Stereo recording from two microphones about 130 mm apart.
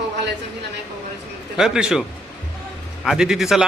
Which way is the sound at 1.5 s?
5° right (ahead or behind).